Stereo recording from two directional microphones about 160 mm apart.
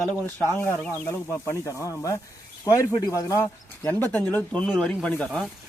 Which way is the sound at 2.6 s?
20° left (ahead or behind).